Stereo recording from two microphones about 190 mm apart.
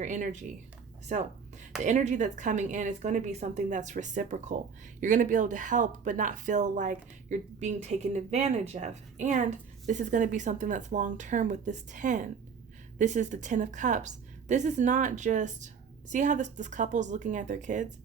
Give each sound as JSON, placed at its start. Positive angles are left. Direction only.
{"t": 0.0, "sound": "speech", "side_deg": -40}
{"t": 1.8, "sound": "speech", "side_deg": -40}